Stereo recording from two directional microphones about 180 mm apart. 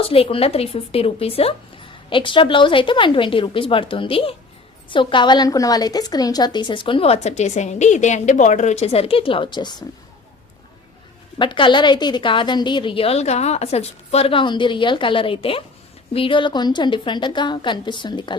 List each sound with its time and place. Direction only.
0.0 s a woman's voice: 30° left (ahead or behind)
11.3 s a woman's voice: 25° left (ahead or behind)